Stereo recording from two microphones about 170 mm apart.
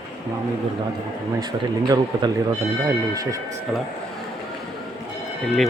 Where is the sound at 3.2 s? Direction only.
20° right (ahead or behind).